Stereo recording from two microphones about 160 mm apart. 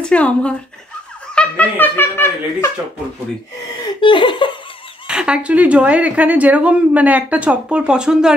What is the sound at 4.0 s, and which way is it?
Laughter, 30° left (ahead or behind).